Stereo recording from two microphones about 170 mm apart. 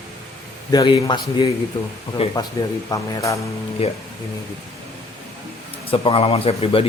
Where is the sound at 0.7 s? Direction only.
25° left (ahead or behind).